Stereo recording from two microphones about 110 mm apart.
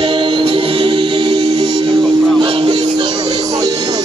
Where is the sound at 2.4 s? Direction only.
55° right (ahead or behind).